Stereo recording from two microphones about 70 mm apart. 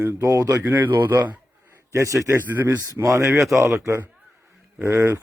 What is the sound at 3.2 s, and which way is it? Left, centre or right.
Speech, right.